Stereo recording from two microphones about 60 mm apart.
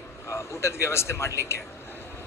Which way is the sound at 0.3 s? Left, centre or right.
Left.